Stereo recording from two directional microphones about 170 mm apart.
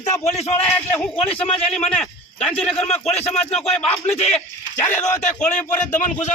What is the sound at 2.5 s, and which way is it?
Speech, 35° left (ahead or behind).